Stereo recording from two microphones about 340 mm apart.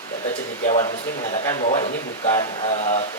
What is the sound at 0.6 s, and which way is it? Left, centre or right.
Speech, centre.